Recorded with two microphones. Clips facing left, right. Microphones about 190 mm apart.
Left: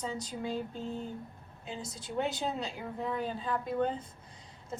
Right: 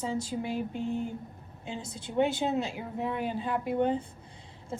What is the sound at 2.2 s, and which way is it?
Speech, 25° right (ahead or behind).